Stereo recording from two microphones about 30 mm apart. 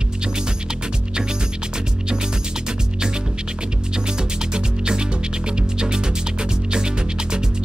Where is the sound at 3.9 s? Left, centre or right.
Right.